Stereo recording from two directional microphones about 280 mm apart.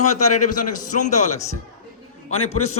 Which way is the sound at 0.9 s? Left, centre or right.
Left.